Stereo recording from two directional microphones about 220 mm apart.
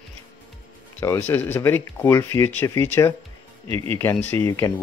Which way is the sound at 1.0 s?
10° left (ahead or behind).